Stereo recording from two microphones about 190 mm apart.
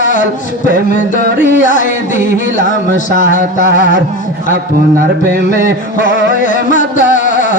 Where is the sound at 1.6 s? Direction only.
40° left (ahead or behind).